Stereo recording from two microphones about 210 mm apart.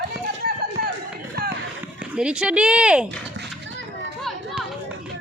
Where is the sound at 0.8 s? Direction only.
45° right (ahead or behind).